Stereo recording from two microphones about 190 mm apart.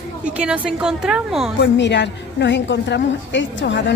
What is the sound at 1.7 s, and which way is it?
A woman's voice, 65° left (ahead or behind).